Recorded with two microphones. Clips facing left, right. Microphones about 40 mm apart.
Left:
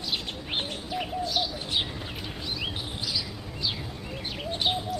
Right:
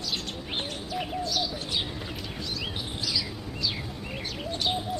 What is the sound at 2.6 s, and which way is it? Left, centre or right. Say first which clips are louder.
Chirp: even; centre.